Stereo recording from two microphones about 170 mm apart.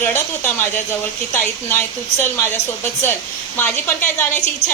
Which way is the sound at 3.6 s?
15° left (ahead or behind).